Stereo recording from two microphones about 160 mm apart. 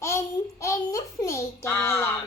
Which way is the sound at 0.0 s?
20° left (ahead or behind).